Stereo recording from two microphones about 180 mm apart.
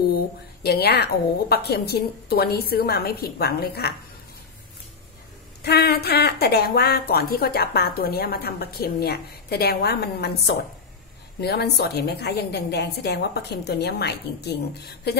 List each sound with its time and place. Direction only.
0.7 s speech: 60° left (ahead or behind)
5.6 s speech: 65° left (ahead or behind)